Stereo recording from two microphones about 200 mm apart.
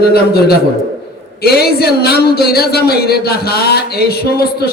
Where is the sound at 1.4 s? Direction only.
50° left (ahead or behind).